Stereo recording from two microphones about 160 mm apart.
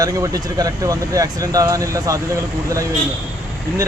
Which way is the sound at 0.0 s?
20° right (ahead or behind).